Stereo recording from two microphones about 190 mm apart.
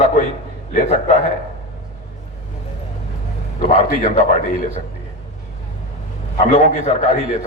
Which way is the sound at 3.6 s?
40° left (ahead or behind).